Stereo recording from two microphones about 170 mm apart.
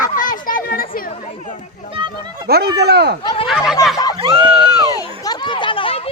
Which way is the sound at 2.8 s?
75° right (ahead or behind).